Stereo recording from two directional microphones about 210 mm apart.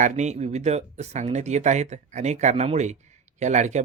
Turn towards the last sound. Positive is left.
turn(degrees=-35)  # may be behind; listen again after turning